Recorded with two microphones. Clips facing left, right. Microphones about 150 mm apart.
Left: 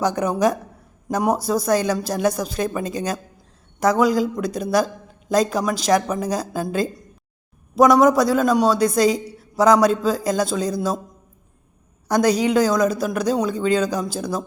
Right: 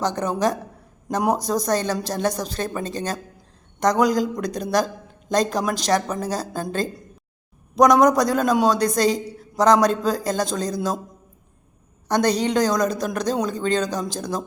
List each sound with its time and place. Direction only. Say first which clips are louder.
0.0 s a man's voice: left 3 dB; 10° left (ahead or behind)
12.0 s speech: left 2 dB; 10° left (ahead or behind)